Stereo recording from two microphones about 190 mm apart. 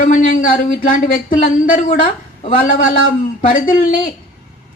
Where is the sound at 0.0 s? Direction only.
45° left (ahead or behind).